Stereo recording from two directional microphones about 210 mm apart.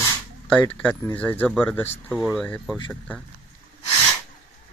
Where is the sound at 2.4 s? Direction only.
5° left (ahead or behind).